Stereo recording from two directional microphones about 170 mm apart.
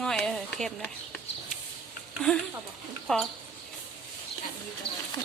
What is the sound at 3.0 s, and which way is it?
Speech, 5° left (ahead or behind).